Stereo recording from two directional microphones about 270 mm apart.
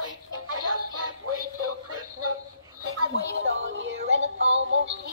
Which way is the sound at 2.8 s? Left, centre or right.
Right.